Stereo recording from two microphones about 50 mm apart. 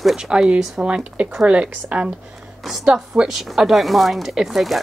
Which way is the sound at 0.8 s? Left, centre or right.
Right.